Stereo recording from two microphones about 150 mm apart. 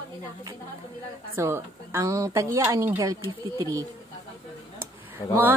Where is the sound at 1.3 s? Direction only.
15° right (ahead or behind).